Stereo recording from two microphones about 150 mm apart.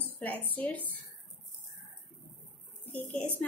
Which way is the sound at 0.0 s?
10° left (ahead or behind).